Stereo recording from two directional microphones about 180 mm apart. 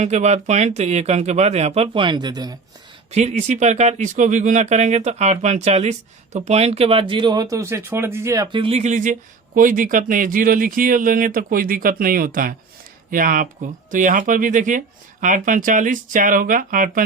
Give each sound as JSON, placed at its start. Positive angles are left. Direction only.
{"t": 0.0, "sound": "speech", "side_deg": -40}
{"t": 3.1, "sound": "speech", "side_deg": -40}
{"t": 8.5, "sound": "speech", "side_deg": -35}